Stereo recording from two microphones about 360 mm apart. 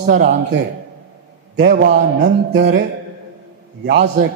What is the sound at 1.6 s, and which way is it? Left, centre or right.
A man's voice, right.